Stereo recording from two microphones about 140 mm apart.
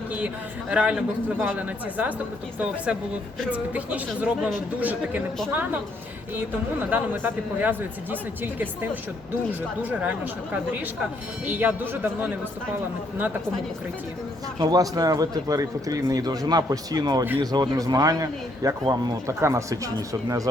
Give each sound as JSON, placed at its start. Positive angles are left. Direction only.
{"t": 0.7, "sound": "speech", "side_deg": -10}
{"t": 6.9, "sound": "speech", "side_deg": -10}
{"t": 10.0, "sound": "speech", "side_deg": -10}
{"t": 14.6, "sound": "speech", "side_deg": -25}